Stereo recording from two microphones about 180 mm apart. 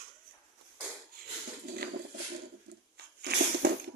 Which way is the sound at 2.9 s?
65° right (ahead or behind).